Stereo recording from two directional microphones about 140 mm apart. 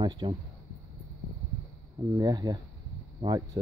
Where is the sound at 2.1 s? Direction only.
25° right (ahead or behind).